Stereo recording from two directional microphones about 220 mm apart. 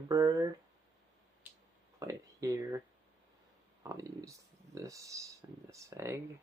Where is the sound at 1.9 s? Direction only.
15° right (ahead or behind).